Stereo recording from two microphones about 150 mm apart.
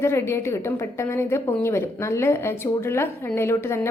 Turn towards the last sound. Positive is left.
turn(degrees=15)  # may be behind; listen again after turning